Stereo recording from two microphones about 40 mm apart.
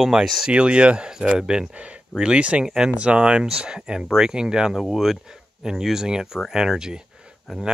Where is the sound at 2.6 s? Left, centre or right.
Centre.